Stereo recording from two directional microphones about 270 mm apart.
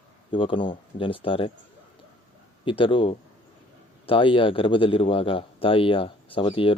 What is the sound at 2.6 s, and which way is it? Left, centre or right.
Speech, centre.